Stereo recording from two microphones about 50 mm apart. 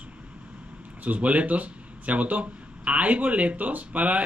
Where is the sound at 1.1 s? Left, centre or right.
Right.